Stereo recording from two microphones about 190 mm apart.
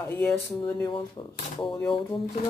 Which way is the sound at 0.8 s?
25° left (ahead or behind).